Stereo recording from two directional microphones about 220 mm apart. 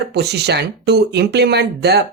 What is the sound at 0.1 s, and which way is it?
Speech, 50° right (ahead or behind).